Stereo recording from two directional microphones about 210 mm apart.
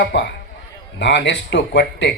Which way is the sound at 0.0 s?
55° left (ahead or behind).